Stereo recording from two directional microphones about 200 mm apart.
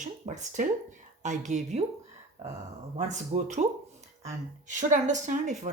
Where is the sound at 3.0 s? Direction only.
35° right (ahead or behind).